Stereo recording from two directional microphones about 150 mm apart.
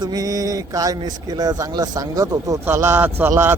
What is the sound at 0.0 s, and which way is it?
A man's voice, 25° right (ahead or behind).